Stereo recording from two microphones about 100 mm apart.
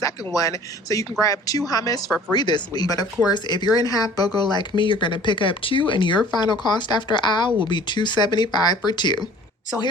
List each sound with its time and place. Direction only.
0.3 s speech: 35° left (ahead or behind)